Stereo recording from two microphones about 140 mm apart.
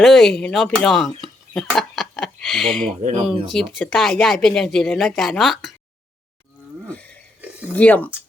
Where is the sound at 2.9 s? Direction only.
60° right (ahead or behind).